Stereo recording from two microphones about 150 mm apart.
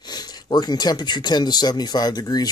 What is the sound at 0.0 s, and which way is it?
Speech, 25° left (ahead or behind).